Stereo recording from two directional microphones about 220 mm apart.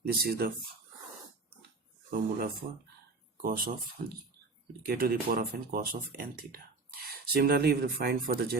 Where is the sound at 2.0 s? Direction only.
40° right (ahead or behind).